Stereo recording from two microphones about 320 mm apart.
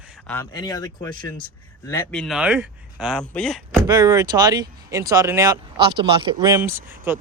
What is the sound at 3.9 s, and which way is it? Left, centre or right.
Speech, centre.